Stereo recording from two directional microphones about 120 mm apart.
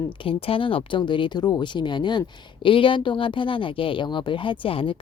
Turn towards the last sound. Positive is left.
turn(degrees=45)  # may be behind; listen again after turning